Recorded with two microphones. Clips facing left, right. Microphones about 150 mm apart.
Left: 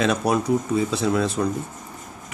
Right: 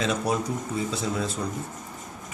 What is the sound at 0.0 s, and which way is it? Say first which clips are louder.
Speech: left 5 dB; 65° left (ahead or behind).